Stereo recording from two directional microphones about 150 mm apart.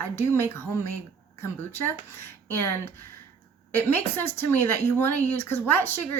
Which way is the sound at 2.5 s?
15° left (ahead or behind).